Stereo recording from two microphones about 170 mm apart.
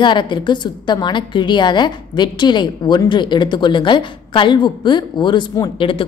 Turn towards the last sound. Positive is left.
turn(degrees=30)  # may be behind; listen again after turning